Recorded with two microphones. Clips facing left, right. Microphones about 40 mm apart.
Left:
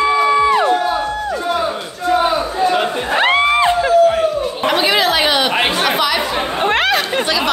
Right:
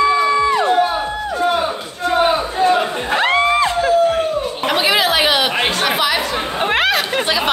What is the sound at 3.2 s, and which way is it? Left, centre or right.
Music, centre.